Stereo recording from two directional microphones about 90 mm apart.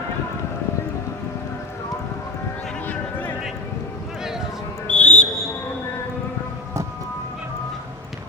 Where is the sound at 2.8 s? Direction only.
20° left (ahead or behind).